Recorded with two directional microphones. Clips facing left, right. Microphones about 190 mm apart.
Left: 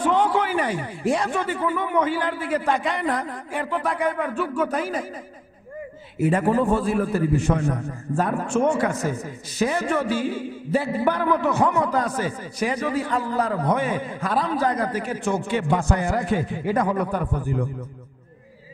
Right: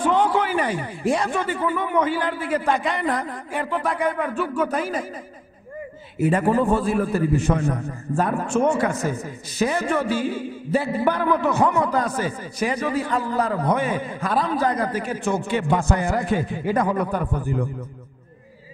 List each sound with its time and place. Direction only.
0.0 s a man's voice: 15° right (ahead or behind)
6.3 s a man's voice: 20° right (ahead or behind)
7.6 s a man's voice: 25° right (ahead or behind)